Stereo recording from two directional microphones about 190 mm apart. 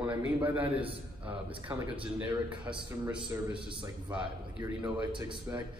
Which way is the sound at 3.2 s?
25° right (ahead or behind).